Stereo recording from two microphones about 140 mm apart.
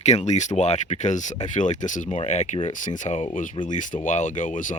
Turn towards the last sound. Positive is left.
turn(degrees=65)  # may be behind; listen again after turning